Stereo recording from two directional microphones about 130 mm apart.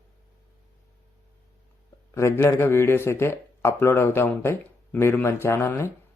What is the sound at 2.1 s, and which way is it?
Speech, 20° left (ahead or behind).